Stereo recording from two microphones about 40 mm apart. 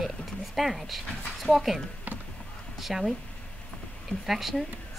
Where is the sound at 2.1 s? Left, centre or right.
Right.